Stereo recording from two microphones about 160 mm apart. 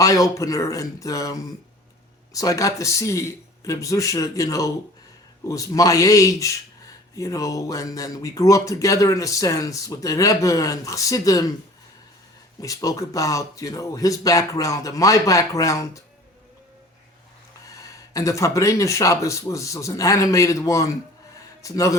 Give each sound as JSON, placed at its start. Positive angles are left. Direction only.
{"t": 0.0, "sound": "speech", "side_deg": 20}
{"t": 12.6, "sound": "speech", "side_deg": 20}
{"t": 17.7, "sound": "speech", "side_deg": 20}